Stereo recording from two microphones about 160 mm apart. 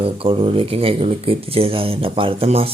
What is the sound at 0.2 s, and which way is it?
Speech, 35° right (ahead or behind).